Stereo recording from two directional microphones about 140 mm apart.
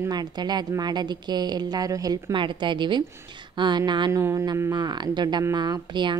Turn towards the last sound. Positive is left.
turn(degrees=-35)  # may be behind; listen again after turning